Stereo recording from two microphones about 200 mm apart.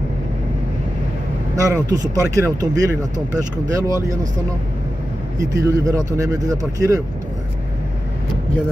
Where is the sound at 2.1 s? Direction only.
15° right (ahead or behind).